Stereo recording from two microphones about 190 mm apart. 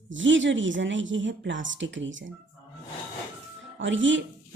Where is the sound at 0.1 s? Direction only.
80° right.